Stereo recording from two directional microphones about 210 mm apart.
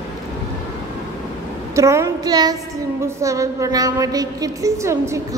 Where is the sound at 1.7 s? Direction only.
15° right (ahead or behind).